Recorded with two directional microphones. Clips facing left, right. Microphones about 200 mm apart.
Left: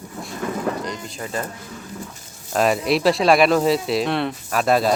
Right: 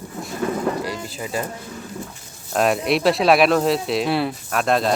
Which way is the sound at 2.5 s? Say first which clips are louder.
Even; centre (ahead or behind).